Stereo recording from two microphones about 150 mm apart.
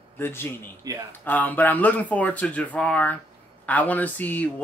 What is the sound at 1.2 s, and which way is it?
Speech, 10° left (ahead or behind).